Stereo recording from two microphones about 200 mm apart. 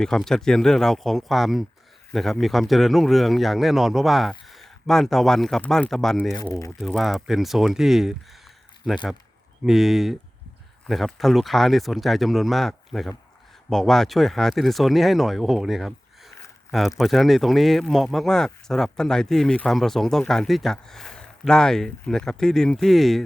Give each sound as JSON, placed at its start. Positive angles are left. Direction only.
{"t": 0.0, "sound": "speech", "side_deg": 0}
{"t": 6.3, "sound": "speech", "side_deg": 15}
{"t": 6.7, "sound": "speech", "side_deg": 0}